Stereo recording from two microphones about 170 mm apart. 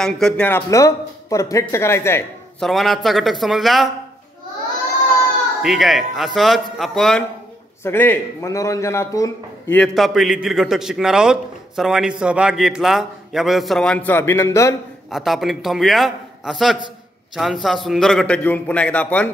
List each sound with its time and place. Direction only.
0.0 s speech: 5° left (ahead or behind)
2.6 s a man's voice: centre (ahead or behind)
5.6 s a man's voice: centre (ahead or behind); by 9.8 s 20° left (ahead or behind)
9.8 s a man's voice: centre (ahead or behind); by 14.8 s 15° left (ahead or behind)
15.0 s a man's voice: centre (ahead or behind)